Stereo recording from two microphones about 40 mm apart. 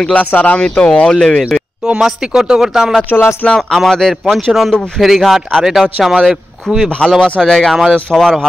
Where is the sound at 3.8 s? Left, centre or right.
Centre.